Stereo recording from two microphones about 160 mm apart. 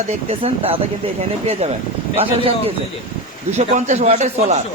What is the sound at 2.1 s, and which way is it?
Speech, 35° right (ahead or behind).